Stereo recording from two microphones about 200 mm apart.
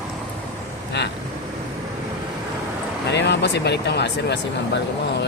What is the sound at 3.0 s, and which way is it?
Speech, 60° left (ahead or behind).